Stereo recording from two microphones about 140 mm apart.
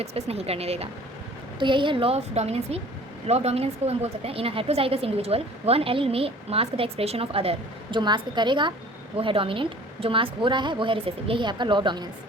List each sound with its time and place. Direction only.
0.0 s a woman's voice: 45° right (ahead or behind)
1.5 s a woman's voice: 35° right (ahead or behind)